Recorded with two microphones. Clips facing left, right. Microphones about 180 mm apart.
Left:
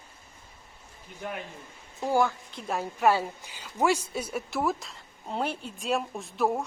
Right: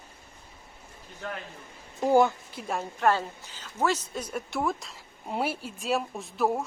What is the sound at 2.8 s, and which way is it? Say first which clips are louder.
A woman's voice: left 1 dB; 10° left (ahead or behind).